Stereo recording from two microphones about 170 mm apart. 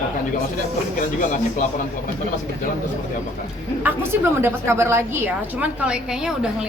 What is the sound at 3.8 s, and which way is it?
A woman's voice, 15° right (ahead or behind).